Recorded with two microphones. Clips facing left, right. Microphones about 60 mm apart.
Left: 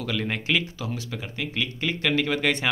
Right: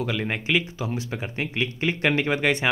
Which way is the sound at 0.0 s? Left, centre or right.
Centre.